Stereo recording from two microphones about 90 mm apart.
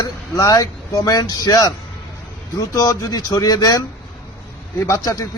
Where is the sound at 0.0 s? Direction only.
40° left (ahead or behind).